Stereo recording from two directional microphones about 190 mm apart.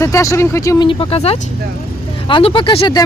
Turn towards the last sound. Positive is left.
turn(degrees=25)  # may be behind; listen again after turning